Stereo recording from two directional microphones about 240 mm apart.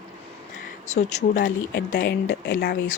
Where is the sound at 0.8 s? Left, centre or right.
Left.